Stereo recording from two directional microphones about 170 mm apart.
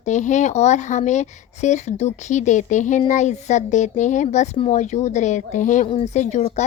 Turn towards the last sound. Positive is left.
turn(degrees=45)  # may be behind; listen again after turning